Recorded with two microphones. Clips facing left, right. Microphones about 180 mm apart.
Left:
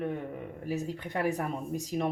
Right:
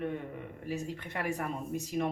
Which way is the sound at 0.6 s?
40° left (ahead or behind).